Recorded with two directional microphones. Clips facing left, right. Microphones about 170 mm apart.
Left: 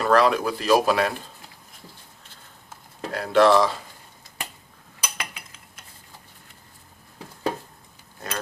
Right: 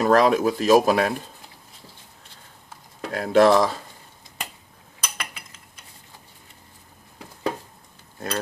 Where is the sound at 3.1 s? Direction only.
45° right (ahead or behind).